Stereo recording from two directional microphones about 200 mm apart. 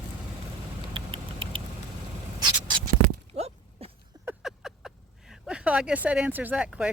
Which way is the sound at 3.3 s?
30° right (ahead or behind).